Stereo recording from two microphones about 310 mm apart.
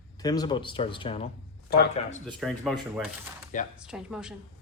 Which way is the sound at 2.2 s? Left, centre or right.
Centre.